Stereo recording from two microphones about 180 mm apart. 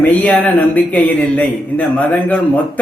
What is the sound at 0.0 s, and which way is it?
A man's voice, 10° left (ahead or behind).